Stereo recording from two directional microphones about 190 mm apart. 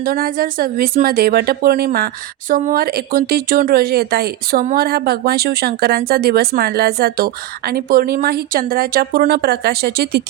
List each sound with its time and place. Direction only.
0.0 s speech: 50° right (ahead or behind)